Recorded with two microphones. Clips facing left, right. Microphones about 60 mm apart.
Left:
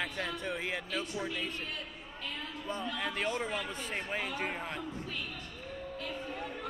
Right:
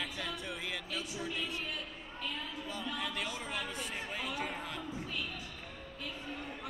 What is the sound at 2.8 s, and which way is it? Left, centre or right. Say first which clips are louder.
Speech: left 4 dB; left.